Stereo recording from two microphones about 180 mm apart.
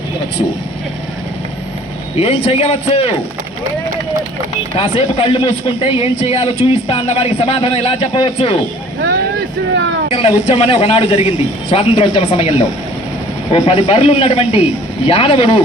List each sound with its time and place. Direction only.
2.1 s speech: 35° left (ahead or behind)
4.8 s speech: 30° left (ahead or behind)
10.1 s speech: 35° left (ahead or behind)